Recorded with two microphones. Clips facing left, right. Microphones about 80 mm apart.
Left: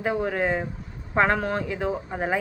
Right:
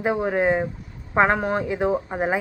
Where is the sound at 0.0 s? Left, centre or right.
Right.